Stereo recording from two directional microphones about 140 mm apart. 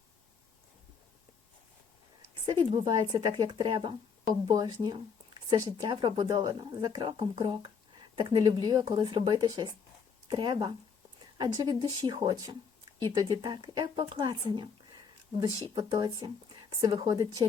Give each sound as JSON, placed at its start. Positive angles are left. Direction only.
{"t": 2.6, "sound": "speech", "side_deg": -35}